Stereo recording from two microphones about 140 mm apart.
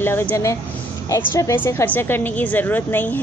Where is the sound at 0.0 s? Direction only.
15° left (ahead or behind).